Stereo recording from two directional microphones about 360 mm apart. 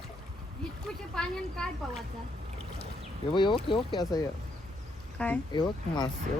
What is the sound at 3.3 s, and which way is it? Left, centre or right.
Speech, centre.